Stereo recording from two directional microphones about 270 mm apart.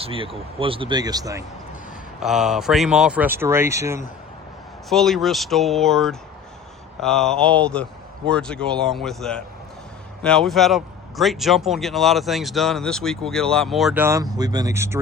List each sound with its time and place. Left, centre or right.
0.0 s speech: centre
2.2 s speech: centre
4.9 s speech: centre